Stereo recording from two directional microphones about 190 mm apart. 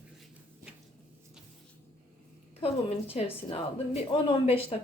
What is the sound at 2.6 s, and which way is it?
A woman's voice, 30° left (ahead or behind).